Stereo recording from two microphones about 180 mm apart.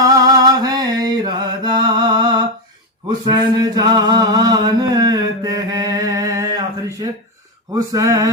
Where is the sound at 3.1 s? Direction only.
25° right (ahead or behind).